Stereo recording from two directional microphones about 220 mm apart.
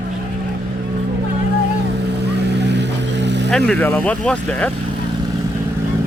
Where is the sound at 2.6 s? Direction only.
50° right (ahead or behind).